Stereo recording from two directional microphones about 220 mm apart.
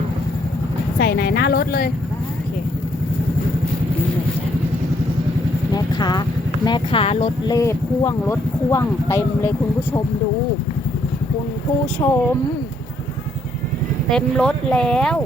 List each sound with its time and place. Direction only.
0.9 s a woman's voice: 45° left (ahead or behind)
5.7 s vehicle: 20° left (ahead or behind)
6.7 s speech: 25° left (ahead or behind)
12.0 s speech: 20° left (ahead or behind)
14.1 s speech: 5° left (ahead or behind)